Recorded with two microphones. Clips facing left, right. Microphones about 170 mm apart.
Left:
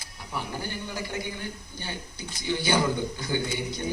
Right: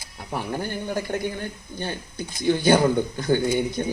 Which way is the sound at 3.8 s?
50° right (ahead or behind).